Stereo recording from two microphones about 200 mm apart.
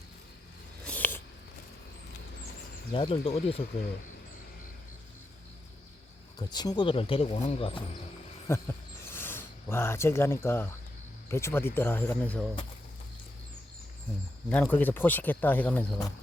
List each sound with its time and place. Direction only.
0.9 s a sound: 10° left (ahead or behind)
2.9 s speech: 25° left (ahead or behind)
6.4 s speech: 20° left (ahead or behind)
8.5 s speech: 15° left (ahead or behind)
14.5 s speech: 5° left (ahead or behind)